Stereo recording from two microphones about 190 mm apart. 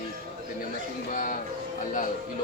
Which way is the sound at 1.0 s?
45° left (ahead or behind).